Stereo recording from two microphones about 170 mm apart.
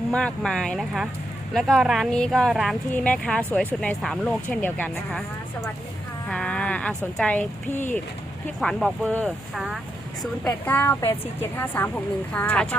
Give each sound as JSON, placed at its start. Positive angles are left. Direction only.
{"t": 0.1, "sound": "speech", "side_deg": 5}
{"t": 6.2, "sound": "speech", "side_deg": 5}